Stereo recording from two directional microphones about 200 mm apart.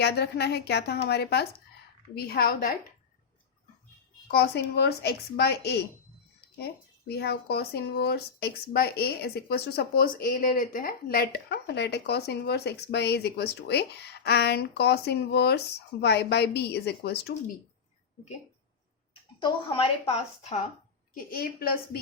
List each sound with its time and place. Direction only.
0.0 s a woman's voice: 55° left (ahead or behind)
4.3 s speech: 55° left (ahead or behind)
7.1 s speech: 55° left (ahead or behind)
19.4 s a woman's voice: 25° left (ahead or behind)
21.2 s a woman's voice: 45° left (ahead or behind)